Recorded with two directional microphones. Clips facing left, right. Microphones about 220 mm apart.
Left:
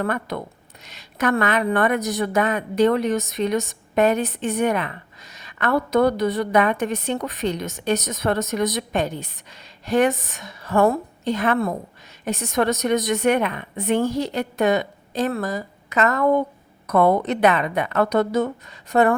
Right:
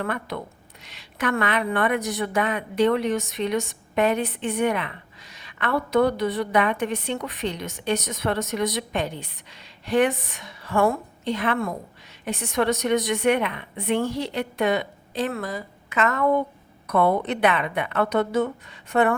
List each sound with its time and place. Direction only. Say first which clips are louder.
0.0 s a woman's voice: left 4 dB; 40° left (ahead or behind)